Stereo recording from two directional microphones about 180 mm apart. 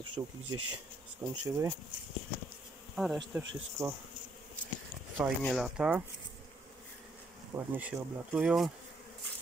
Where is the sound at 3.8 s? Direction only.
15° right (ahead or behind).